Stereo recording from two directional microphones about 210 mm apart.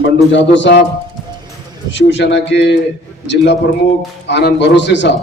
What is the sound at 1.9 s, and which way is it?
Speech, 55° left (ahead or behind).